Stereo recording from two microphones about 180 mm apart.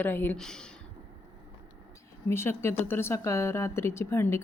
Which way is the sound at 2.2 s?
15° left (ahead or behind).